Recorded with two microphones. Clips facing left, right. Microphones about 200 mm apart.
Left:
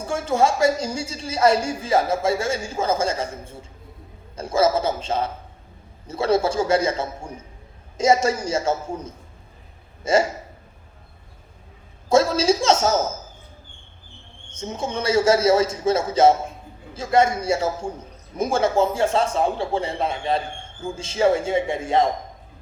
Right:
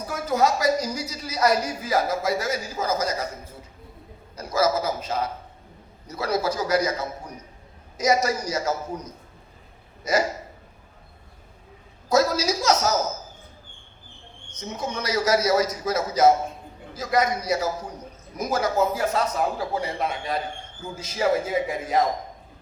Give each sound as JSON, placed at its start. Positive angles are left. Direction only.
{"t": 0.0, "sound": "a woman's voice", "side_deg": 25}
{"t": 12.0, "sound": "a woman's voice", "side_deg": 25}
{"t": 14.5, "sound": "a woman's voice", "side_deg": 25}